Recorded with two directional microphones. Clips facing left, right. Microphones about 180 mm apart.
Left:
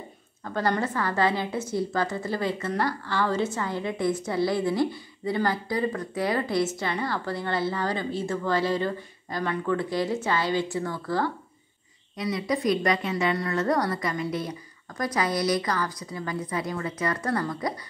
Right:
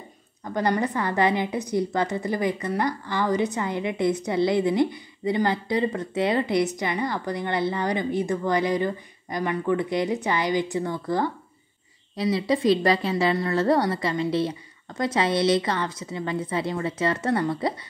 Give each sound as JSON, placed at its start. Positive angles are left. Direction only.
{"t": 0.4, "sound": "a woman's voice", "side_deg": -15}
{"t": 12.2, "sound": "a woman's voice", "side_deg": -30}